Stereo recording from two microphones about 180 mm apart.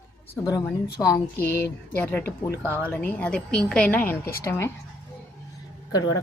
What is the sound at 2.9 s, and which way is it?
Speech, 10° left (ahead or behind).